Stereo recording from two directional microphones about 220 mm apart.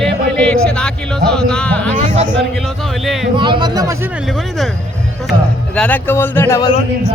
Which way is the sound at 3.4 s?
20° right (ahead or behind).